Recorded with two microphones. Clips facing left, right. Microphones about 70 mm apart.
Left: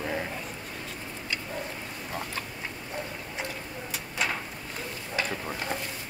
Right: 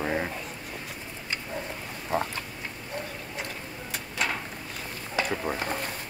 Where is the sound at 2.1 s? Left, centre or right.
Right.